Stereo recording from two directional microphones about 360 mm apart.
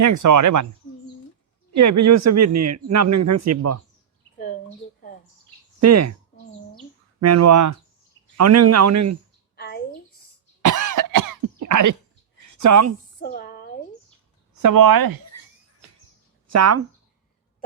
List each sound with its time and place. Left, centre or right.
0.0 s a man's voice: right
1.7 s a man's voice: right
5.8 s a man's voice: right
7.2 s a man's voice: right
9.6 s a sound: left
10.6 s cough: right
12.5 s a woman's voice: right
13.1 s a sound: left
14.6 s speech: right
16.5 s speech: right